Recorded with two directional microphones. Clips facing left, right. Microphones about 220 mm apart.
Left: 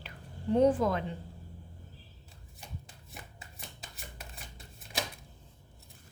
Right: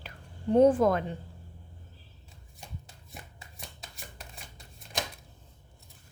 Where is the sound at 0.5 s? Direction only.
50° right (ahead or behind).